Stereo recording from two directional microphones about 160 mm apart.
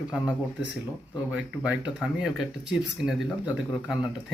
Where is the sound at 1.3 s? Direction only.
10° right (ahead or behind).